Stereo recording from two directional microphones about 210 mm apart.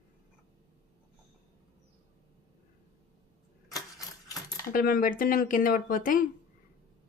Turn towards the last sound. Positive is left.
turn(degrees=40)  # may be behind; listen again after turning